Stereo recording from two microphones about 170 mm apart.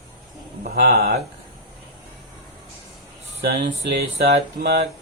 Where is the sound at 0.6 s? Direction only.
60° right (ahead or behind).